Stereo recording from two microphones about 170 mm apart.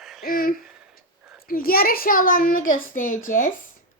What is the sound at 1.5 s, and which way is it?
A child's voice, 60° left (ahead or behind).